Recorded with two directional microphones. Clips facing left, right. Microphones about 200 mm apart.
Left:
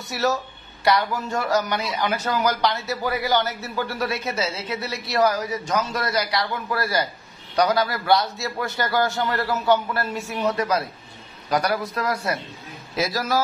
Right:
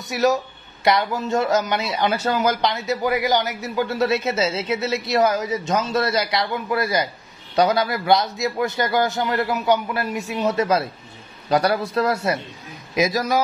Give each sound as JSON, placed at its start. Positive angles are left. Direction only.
{"t": 0.1, "sound": "a man's voice", "side_deg": -15}
{"t": 12.9, "sound": "a man's voice", "side_deg": -15}